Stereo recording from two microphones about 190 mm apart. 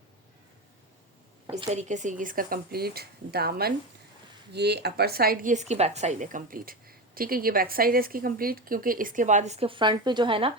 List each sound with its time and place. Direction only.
1.5 s a woman's voice: 30° right (ahead or behind)
1.9 s speech: 40° right (ahead or behind)